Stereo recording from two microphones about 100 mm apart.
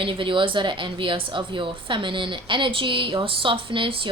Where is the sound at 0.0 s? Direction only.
60° right (ahead or behind).